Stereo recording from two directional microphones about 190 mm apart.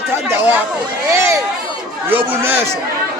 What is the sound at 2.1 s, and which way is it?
Speech, 10° right (ahead or behind).